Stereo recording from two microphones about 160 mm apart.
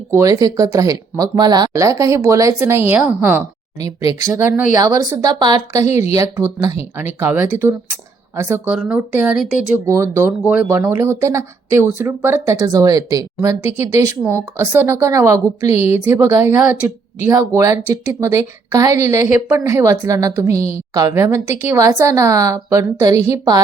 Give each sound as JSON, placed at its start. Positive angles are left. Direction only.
{"t": 0.1, "sound": "a woman's voice", "side_deg": -20}